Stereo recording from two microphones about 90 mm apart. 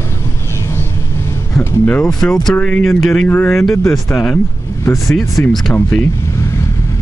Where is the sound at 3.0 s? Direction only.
Centre (ahead or behind).